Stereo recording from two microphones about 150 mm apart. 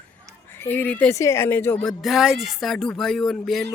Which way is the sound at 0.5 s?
10° left (ahead or behind).